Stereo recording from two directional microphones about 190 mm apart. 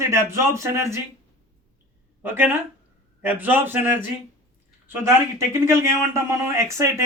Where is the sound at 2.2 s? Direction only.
10° right (ahead or behind).